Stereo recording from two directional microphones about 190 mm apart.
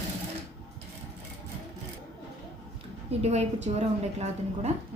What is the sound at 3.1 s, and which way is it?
A woman's voice, 35° right (ahead or behind).